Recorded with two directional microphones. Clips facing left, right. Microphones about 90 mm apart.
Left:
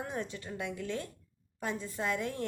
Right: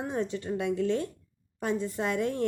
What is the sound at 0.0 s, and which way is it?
A woman's voice, 25° right (ahead or behind).